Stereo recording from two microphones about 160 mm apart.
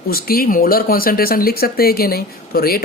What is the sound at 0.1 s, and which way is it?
Speech, 70° left (ahead or behind).